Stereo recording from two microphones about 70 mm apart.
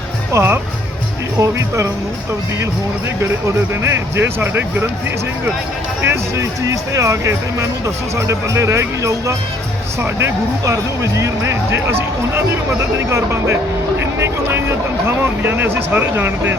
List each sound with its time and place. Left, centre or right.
0.3 s speech: right
1.4 s speech: right
3.8 s speech: right
6.1 s speech: right